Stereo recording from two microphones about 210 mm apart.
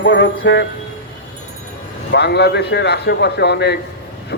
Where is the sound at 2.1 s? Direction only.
55° left (ahead or behind).